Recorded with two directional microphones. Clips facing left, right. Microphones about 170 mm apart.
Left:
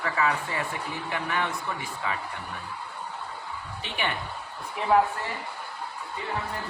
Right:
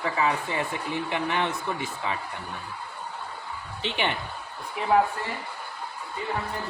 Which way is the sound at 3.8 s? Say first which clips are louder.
Right 4 dB; 25° right (ahead or behind).